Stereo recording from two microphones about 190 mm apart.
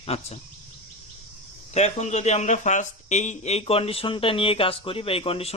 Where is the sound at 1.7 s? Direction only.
35° left (ahead or behind).